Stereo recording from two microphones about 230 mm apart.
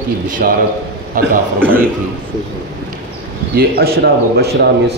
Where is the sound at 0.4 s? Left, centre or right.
Right.